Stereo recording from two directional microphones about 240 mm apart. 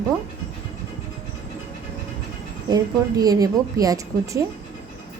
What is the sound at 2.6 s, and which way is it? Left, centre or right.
A woman's voice, centre.